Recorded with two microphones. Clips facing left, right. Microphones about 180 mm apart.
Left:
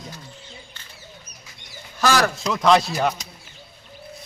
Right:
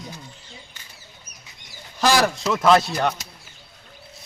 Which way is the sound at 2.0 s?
15° right (ahead or behind).